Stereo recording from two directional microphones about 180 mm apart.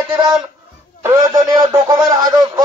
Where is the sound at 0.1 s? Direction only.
25° right (ahead or behind).